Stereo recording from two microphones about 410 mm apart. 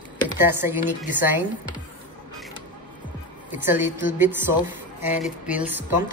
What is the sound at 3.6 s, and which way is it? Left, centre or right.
A woman's voice, centre.